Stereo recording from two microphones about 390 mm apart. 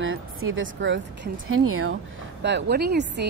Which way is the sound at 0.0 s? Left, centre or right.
Right.